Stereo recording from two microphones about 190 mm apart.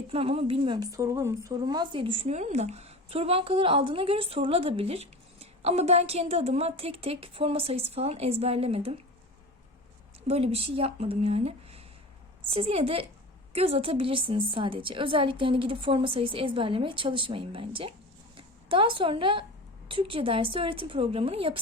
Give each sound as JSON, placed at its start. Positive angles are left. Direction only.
{"t": 0.1, "sound": "a woman's voice", "side_deg": -30}
{"t": 10.2, "sound": "a woman's voice", "side_deg": -30}